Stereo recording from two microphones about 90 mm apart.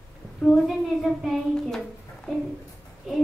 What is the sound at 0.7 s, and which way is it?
A child's voice, centre (ahead or behind).